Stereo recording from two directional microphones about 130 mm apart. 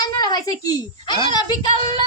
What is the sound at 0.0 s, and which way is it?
A woman's voice, 30° left (ahead or behind).